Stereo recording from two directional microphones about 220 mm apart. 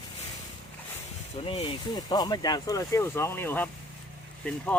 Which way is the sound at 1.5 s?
25° left (ahead or behind).